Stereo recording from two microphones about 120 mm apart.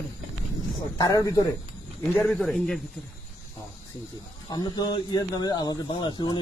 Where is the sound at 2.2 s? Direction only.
5° left (ahead or behind).